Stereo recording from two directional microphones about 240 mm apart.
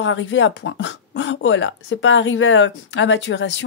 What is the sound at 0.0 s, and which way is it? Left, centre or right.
Speech, left.